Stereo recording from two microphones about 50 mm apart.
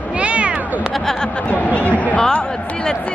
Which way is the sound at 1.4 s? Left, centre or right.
Left.